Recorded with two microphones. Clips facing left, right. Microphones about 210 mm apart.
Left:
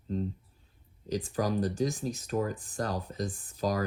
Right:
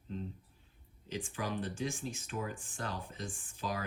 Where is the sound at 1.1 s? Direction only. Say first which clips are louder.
Left 8 dB; 40° left (ahead or behind).